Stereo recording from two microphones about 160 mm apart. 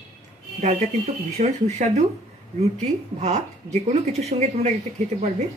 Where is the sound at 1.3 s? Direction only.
45° right (ahead or behind).